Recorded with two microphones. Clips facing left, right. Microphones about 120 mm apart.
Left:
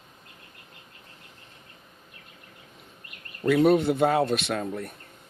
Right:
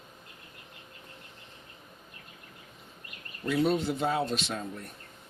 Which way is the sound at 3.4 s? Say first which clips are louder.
Left 7 dB; 60° left (ahead or behind).